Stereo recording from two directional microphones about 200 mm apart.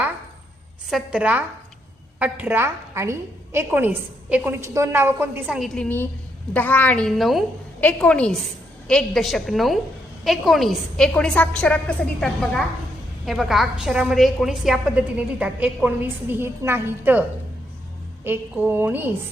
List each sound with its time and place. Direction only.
0.9 s a woman's voice: 5° right (ahead or behind)
18.3 s a woman's voice: 10° right (ahead or behind)